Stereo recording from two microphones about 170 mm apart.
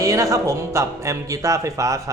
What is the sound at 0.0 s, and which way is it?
Speech, 20° right (ahead or behind).